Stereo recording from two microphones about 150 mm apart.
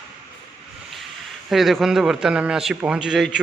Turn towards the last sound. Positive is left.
turn(degrees=-5)  # may be behind; listen again after turning